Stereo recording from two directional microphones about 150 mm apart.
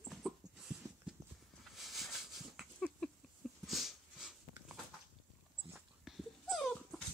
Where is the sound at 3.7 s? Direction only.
Centre (ahead or behind).